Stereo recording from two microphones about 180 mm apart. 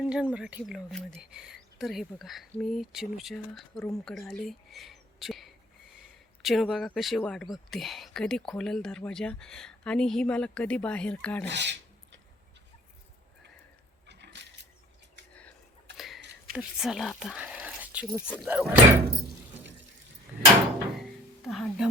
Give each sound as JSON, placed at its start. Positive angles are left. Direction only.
{"t": 0.0, "sound": "speech", "side_deg": -5}
{"t": 11.4, "sound": "speech", "side_deg": -75}
{"t": 14.1, "sound": "mechanisms", "side_deg": -70}
{"t": 16.0, "sound": "a sound", "side_deg": 0}
{"t": 16.5, "sound": "speech", "side_deg": -5}
{"t": 20.9, "sound": "music", "side_deg": 0}